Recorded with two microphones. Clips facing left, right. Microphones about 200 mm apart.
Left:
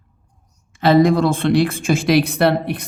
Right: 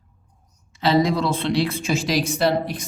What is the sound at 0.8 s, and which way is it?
A man's voice, 55° left (ahead or behind).